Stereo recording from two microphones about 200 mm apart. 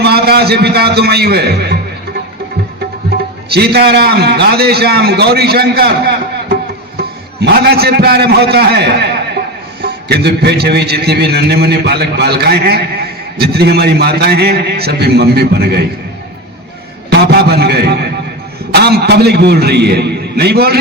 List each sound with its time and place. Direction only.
0.0 s a man's voice: 55° right (ahead or behind)
3.5 s a man's voice: 55° right (ahead or behind)
7.4 s a man's voice: 55° right (ahead or behind)
17.1 s a man's voice: 55° right (ahead or behind)